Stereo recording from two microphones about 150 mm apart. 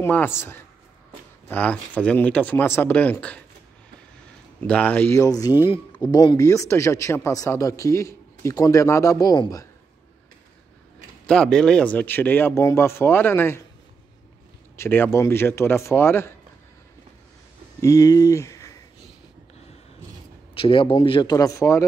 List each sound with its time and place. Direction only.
0.0 s speech: 15° left (ahead or behind)
4.6 s speech: 10° left (ahead or behind)
11.2 s speech: 5° left (ahead or behind)
14.8 s speech: 15° left (ahead or behind)
17.7 s speech: 20° left (ahead or behind)
20.5 s speech: 35° left (ahead or behind); by 21.8 s 20° left (ahead or behind)